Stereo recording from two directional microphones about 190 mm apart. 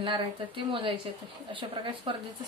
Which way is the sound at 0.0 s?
25° right (ahead or behind).